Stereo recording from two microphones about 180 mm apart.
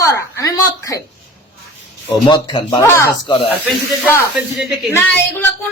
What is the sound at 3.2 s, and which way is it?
Speech, 25° left (ahead or behind).